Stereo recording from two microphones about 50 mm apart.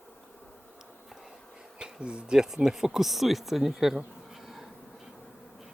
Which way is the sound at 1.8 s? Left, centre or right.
Centre.